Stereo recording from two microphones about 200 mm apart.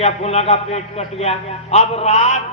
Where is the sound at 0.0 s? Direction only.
30° left (ahead or behind).